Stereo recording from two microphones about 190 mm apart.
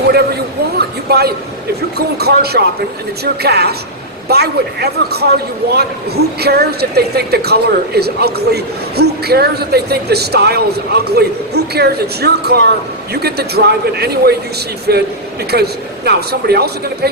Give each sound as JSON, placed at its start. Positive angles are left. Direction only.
{"t": 0.8, "sound": "a sound", "side_deg": -55}
{"t": 2.0, "sound": "a woman's voice", "side_deg": -55}
{"t": 6.4, "sound": "a woman's voice", "side_deg": -55}